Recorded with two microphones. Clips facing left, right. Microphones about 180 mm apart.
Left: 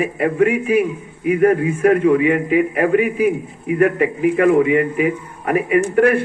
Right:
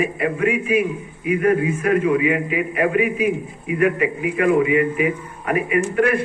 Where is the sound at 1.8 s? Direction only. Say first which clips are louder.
Left 4 dB; 50° left (ahead or behind).